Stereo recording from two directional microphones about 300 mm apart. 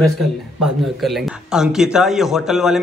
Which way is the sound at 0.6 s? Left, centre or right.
Centre.